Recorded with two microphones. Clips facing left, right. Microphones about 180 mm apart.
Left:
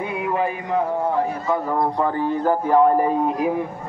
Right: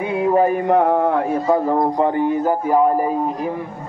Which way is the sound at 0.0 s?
25° right (ahead or behind).